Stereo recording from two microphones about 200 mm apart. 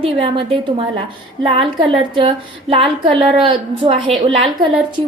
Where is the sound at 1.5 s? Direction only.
25° right (ahead or behind).